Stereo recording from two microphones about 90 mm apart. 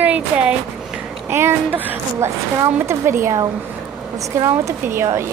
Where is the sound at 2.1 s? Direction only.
30° right (ahead or behind).